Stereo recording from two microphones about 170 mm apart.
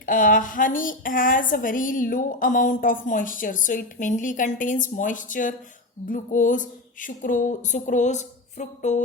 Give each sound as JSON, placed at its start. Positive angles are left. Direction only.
{"t": 0.0, "sound": "a woman's voice", "side_deg": 50}